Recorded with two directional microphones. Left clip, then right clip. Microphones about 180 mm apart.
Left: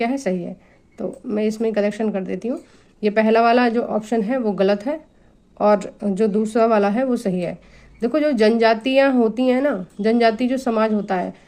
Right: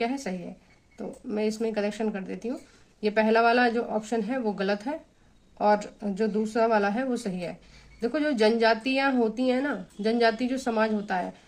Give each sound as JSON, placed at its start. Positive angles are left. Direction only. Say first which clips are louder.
{"t": 0.0, "sound": "a man's voice", "louder": "left 8 dB", "side_deg": 40}